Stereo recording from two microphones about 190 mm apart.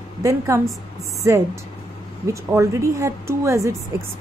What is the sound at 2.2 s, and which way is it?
A woman's voice, 15° right (ahead or behind).